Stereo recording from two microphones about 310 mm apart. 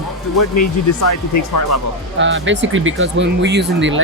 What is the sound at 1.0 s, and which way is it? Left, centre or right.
Speech, left.